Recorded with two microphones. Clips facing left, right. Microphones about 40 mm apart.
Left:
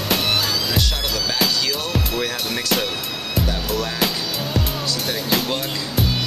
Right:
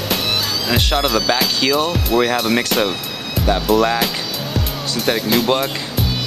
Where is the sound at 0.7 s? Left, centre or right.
Right.